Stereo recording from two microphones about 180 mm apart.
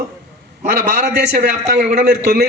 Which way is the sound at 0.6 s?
50° right (ahead or behind).